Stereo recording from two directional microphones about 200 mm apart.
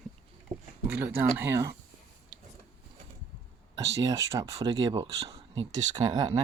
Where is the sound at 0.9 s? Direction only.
10° right (ahead or behind).